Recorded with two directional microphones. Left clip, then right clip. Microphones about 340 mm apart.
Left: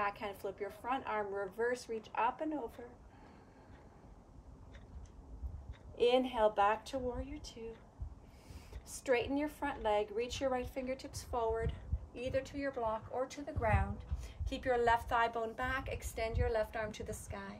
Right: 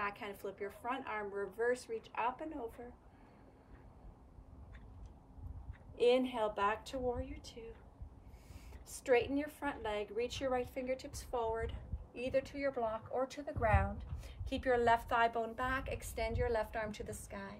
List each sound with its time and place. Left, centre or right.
0.0 s a woman's voice: centre
5.9 s a woman's voice: centre
8.8 s a woman's voice: centre